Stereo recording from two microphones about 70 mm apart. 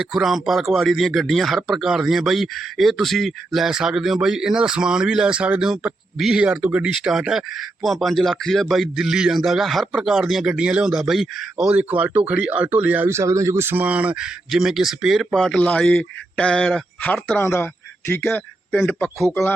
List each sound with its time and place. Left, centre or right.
0.0 s a man's voice: centre
6.9 s a man's voice: centre; by 13.1 s right
13.1 s speech: right
13.8 s a man's voice: centre
17.4 s a man's voice: left